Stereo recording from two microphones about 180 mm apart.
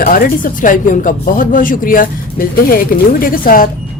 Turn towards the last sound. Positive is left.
turn(degrees=50)  # may be behind; listen again after turning